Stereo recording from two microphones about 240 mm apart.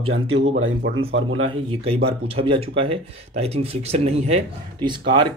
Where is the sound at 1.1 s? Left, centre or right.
Right.